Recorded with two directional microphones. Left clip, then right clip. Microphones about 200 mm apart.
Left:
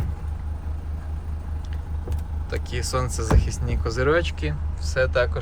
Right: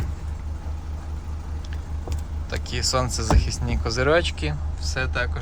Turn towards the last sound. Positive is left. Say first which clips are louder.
# left 5 dB
turn(degrees=0)  # may be behind; listen again after turning